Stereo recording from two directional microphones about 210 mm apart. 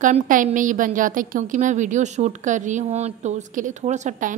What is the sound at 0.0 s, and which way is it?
A woman's voice, 40° right (ahead or behind).